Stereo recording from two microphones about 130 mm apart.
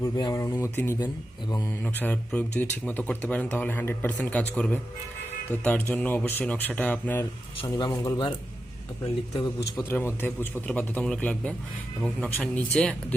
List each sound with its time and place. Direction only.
0.2 s speech: 30° left (ahead or behind)
0.9 s speech: 30° left (ahead or behind)
1.8 s speech: 15° left (ahead or behind)
7.7 s speech: 30° left (ahead or behind)
9.3 s speech: 25° left (ahead or behind); by 13.1 s 5° left (ahead or behind)